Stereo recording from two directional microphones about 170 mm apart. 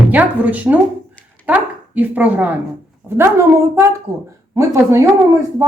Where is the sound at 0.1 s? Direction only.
10° right (ahead or behind).